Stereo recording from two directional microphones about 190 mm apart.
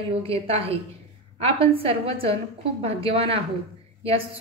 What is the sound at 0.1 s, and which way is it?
A woman's voice, 30° right (ahead or behind).